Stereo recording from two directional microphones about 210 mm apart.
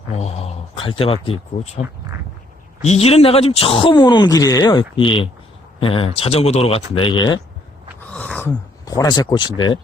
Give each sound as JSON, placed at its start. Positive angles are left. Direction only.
{"t": 0.1, "sound": "speech", "side_deg": 30}
{"t": 2.8, "sound": "speech", "side_deg": 30}
{"t": 8.1, "sound": "speech", "side_deg": 5}